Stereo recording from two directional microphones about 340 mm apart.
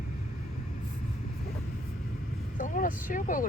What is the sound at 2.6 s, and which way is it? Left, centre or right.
Vehicle, left.